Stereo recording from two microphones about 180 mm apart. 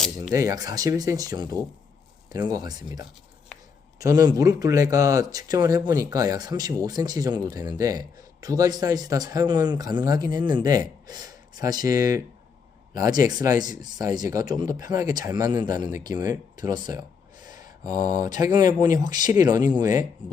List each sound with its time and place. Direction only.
0.3 s speech: 20° right (ahead or behind)